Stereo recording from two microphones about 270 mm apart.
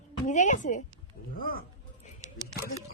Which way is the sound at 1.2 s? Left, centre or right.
Left.